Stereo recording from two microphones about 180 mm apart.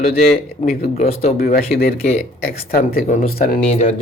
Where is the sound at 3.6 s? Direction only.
35° left (ahead or behind).